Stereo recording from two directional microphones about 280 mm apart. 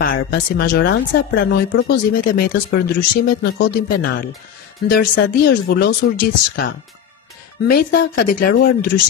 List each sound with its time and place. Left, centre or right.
0.0 s speech: left